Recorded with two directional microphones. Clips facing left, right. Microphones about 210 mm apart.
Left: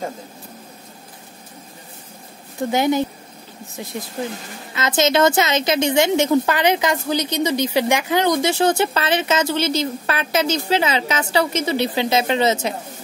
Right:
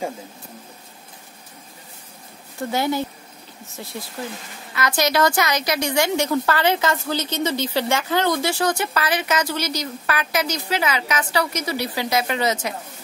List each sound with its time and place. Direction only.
2.7 s a woman's voice: 20° left (ahead or behind)
4.7 s a woman's voice: 25° left (ahead or behind)